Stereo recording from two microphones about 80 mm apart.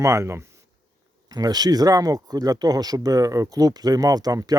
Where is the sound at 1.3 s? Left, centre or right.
Right.